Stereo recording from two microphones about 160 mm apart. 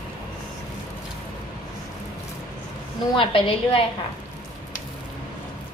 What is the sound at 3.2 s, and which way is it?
Speech, 30° left (ahead or behind).